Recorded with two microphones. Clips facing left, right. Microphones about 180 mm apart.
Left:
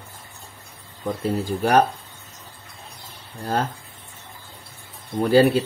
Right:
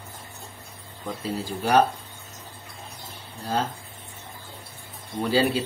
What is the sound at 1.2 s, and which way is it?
Speech, 50° left (ahead or behind).